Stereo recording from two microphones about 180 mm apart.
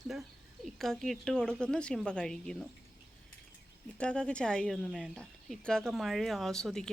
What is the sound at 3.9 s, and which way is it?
Speech, 5° left (ahead or behind).